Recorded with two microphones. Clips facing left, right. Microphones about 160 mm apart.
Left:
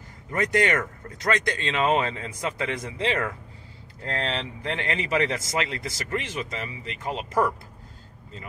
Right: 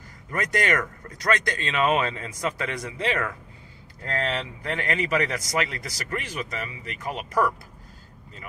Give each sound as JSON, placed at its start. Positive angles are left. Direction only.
{"t": 0.3, "sound": "speech", "side_deg": 20}